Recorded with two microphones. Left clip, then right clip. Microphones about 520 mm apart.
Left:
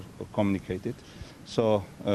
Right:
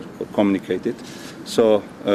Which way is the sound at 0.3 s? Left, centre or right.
Left.